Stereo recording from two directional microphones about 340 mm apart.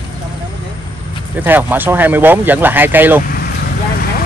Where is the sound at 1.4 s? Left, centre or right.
Centre.